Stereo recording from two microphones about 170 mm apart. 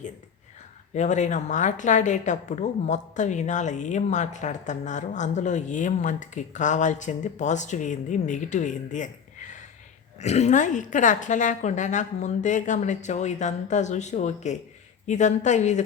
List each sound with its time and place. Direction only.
0.9 s speech: 45° left (ahead or behind)